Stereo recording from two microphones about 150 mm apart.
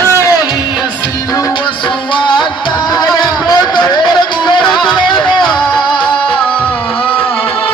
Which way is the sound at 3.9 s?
30° left (ahead or behind).